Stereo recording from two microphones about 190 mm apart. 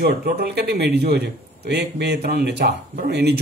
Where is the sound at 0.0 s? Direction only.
55° right (ahead or behind).